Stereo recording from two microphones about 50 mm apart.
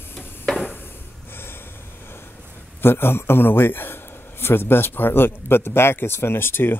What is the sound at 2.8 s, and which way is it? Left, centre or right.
A man's voice, left.